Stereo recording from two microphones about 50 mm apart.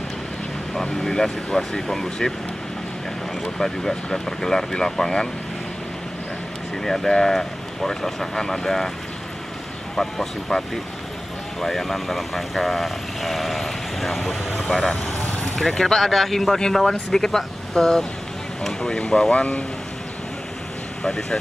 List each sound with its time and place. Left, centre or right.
0.7 s speech: centre
3.4 s speech: centre
6.8 s speech: centre
9.9 s speech: centre
19.3 s speech: left
21.0 s speech: centre